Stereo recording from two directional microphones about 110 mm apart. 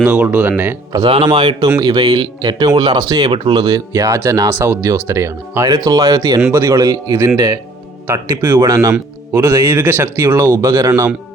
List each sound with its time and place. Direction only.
0.0 s speech: 15° right (ahead or behind)
1.0 s a man's voice: 45° right (ahead or behind)
3.3 s speech: 50° right (ahead or behind); by 11.1 s 25° right (ahead or behind)